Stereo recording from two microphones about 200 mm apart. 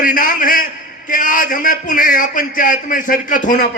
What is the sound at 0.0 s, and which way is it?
A man's voice, 45° left (ahead or behind).